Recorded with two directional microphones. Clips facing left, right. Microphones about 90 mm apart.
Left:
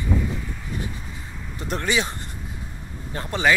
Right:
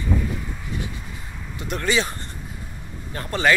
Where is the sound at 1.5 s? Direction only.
35° left (ahead or behind).